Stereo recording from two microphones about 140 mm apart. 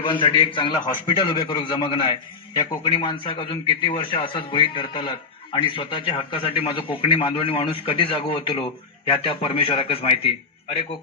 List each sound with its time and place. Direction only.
0.0 s a man's voice: 35° left (ahead or behind)